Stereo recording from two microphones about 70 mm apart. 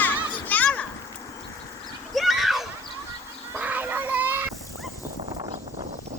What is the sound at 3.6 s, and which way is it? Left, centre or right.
Child singing, right.